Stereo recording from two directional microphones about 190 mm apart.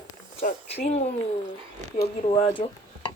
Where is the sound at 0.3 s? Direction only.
35° left (ahead or behind).